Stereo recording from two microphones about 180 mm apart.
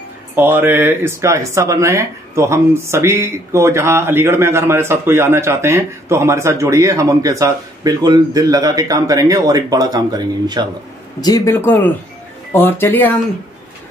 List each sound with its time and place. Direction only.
0.4 s speech: 10° right (ahead or behind)
11.1 s speech: 20° left (ahead or behind)